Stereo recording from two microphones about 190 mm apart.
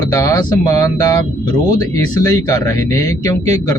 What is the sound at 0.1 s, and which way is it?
Speech, 15° left (ahead or behind).